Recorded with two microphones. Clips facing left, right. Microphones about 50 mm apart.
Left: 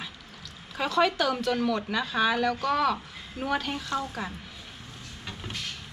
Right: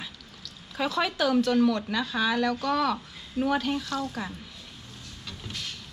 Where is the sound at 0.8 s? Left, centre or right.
Centre.